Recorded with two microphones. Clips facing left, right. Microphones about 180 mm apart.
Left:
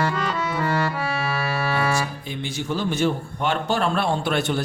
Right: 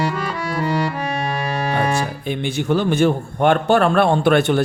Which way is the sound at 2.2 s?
60° right (ahead or behind).